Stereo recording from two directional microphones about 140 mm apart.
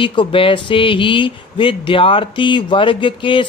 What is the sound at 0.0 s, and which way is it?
Speech, 35° left (ahead or behind).